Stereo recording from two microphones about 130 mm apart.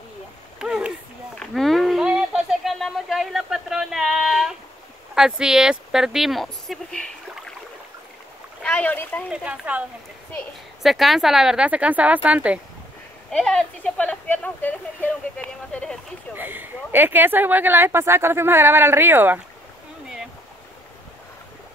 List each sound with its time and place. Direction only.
0.6 s a sound: 5° right (ahead or behind)
5.1 s speech: 5° right (ahead or behind)
8.6 s speech: 10° left (ahead or behind)
9.3 s speech: 10° right (ahead or behind)
13.3 s speech: 5° left (ahead or behind)
16.3 s speech: 15° right (ahead or behind)